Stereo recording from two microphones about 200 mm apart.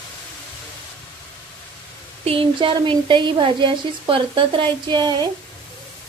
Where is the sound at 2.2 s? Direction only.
25° right (ahead or behind).